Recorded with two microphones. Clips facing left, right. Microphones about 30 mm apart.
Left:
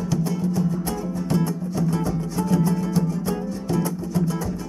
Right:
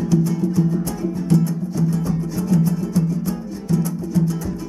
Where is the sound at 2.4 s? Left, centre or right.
Centre.